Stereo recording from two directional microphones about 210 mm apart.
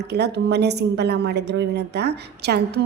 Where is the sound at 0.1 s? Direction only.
50° right (ahead or behind).